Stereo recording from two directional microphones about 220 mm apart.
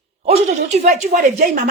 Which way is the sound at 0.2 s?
30° right (ahead or behind).